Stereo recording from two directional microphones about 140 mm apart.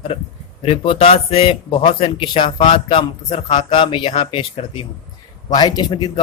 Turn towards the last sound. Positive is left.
turn(degrees=30)  # may be behind; listen again after turning